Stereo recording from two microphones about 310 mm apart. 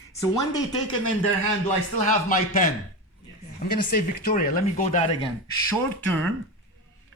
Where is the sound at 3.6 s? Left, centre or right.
Left.